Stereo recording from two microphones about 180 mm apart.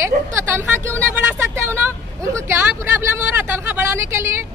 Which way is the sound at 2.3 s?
15° right (ahead or behind).